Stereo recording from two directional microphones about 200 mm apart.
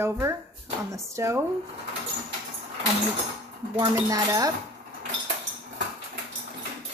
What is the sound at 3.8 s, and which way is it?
Speech, 15° right (ahead or behind).